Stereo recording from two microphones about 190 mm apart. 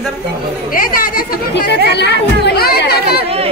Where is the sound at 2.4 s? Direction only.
55° left (ahead or behind).